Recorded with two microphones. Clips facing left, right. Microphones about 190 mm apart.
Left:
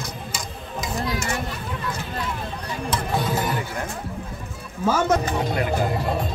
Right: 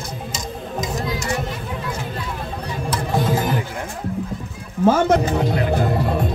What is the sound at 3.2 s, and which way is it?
Music, 45° right (ahead or behind).